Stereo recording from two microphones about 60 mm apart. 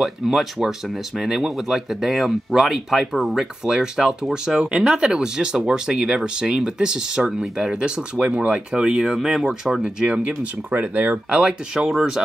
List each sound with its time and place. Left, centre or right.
0.0 s speech: centre
10.7 s speech: right
11.2 s speech: centre